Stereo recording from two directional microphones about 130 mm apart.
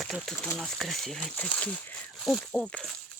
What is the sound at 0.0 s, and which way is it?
Speech, centre (ahead or behind).